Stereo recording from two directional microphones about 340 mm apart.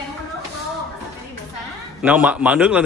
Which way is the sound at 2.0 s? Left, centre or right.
Centre.